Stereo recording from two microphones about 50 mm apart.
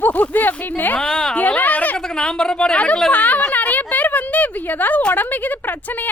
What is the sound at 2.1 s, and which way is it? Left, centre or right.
Speech, centre.